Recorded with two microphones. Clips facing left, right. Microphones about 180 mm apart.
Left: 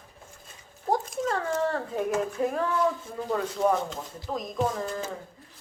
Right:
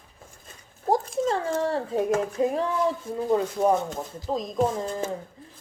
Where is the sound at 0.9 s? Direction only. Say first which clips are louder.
Right 3 dB; 30° right (ahead or behind).